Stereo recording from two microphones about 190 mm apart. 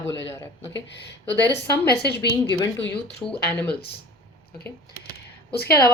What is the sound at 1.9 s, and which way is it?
Speech, 60° left (ahead or behind).